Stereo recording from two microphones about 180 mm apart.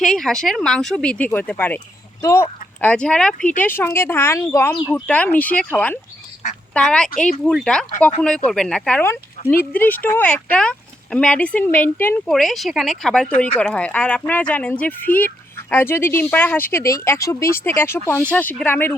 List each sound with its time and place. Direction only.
0.0 s speech: 5° left (ahead or behind)
3.3 s speech: 45° left (ahead or behind)
3.6 s speech: 10° left (ahead or behind)